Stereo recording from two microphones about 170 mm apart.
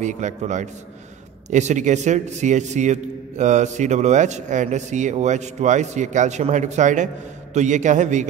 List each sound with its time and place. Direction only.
0.0 s a man's voice: 45° right (ahead or behind)